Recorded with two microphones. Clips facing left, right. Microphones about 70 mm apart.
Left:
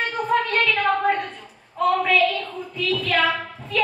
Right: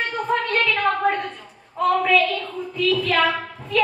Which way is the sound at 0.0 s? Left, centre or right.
Centre.